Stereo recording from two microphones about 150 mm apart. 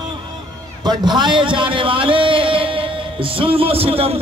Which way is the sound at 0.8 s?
30° right (ahead or behind).